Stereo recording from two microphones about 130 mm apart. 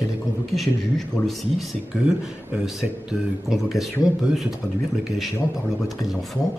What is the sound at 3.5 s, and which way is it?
Speech, centre (ahead or behind).